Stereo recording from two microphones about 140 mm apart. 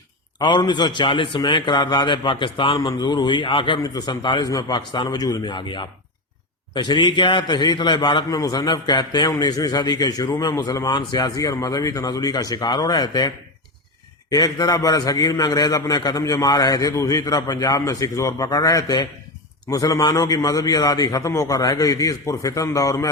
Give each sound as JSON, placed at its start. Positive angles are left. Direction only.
{"t": 0.3, "sound": "a man's voice", "side_deg": 30}